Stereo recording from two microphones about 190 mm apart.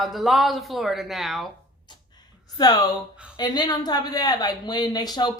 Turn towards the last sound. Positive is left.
turn(degrees=20)  # may be behind; listen again after turning